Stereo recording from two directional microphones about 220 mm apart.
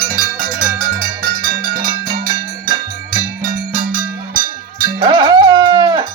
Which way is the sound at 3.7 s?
40° right (ahead or behind).